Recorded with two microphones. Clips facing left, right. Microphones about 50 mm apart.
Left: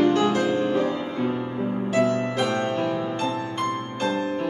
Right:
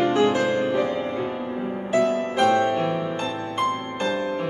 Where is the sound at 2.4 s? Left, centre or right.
Centre.